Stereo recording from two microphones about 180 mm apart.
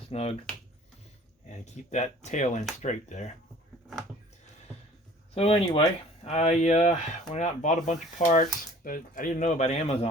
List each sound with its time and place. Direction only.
0.1 s speech: 35° left (ahead or behind)
1.5 s speech: 40° left (ahead or behind)
5.3 s speech: 35° left (ahead or behind)